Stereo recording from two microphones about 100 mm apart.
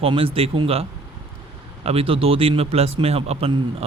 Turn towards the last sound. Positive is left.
turn(degrees=-90)